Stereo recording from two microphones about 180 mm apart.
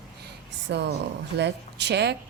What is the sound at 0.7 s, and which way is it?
Speech, 70° right (ahead or behind).